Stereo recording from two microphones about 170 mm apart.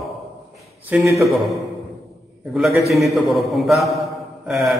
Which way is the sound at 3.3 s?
Centre (ahead or behind).